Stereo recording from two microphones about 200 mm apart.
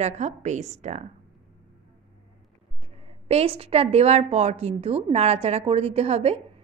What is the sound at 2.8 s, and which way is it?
A woman's voice, 30° right (ahead or behind).